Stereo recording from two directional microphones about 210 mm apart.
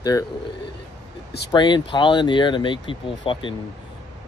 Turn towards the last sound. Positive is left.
turn(degrees=25)  # may be behind; listen again after turning